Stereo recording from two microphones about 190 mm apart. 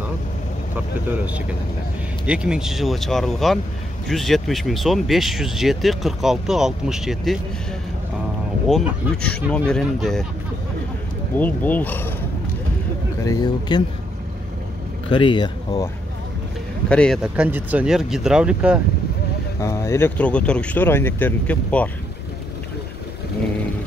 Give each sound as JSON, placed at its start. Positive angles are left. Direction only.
{"t": 2.2, "sound": "speech", "side_deg": -5}
{"t": 8.6, "sound": "speech", "side_deg": 0}
{"t": 11.3, "sound": "speech", "side_deg": 10}
{"t": 15.0, "sound": "speech", "side_deg": 25}
{"t": 16.9, "sound": "speech", "side_deg": 5}
{"t": 19.6, "sound": "speech", "side_deg": 15}